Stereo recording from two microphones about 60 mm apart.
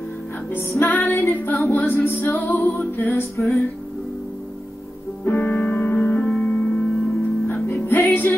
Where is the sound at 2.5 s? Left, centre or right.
Left.